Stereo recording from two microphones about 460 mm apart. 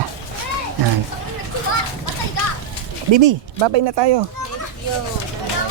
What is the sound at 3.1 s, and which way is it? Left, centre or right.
Speech, right.